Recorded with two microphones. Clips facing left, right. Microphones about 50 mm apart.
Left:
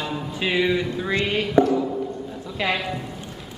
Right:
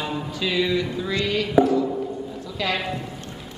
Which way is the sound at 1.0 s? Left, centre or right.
Left.